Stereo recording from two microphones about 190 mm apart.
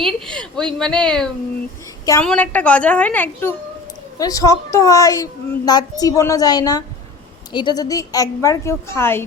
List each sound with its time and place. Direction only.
0.0 s a woman's voice: 5° left (ahead or behind)